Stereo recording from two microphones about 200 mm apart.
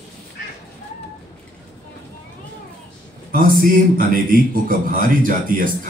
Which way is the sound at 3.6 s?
45° right (ahead or behind).